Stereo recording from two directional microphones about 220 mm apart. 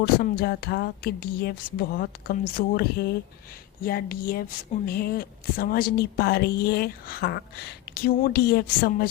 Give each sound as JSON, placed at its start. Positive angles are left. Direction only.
{"t": 0.0, "sound": "speech", "side_deg": 45}